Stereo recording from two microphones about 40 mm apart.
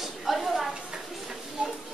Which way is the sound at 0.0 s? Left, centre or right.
Centre.